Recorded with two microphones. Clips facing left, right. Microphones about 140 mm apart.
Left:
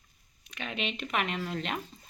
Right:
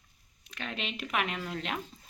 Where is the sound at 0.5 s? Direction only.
5° left (ahead or behind).